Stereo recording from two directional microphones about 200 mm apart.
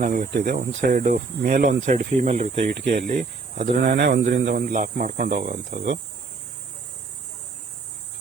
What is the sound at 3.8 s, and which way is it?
Speech, 55° right (ahead or behind).